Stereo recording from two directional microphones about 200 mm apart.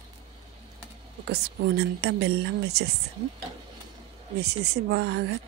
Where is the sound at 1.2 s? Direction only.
55° right (ahead or behind).